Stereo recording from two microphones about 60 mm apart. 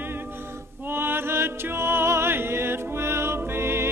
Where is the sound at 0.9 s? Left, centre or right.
Right.